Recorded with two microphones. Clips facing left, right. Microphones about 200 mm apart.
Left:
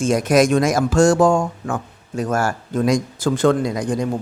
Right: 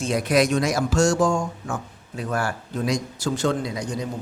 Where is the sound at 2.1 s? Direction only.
45° left (ahead or behind).